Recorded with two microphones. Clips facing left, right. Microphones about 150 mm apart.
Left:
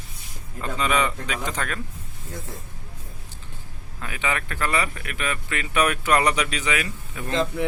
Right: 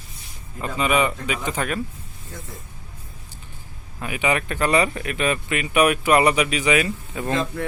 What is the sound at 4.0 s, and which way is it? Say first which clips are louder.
A man's voice: right 5 dB; 15° right (ahead or behind).